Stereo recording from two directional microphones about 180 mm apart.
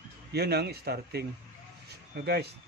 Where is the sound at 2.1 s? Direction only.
65° right (ahead or behind).